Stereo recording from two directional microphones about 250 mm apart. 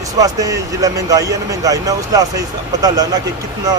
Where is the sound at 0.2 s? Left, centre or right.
Centre.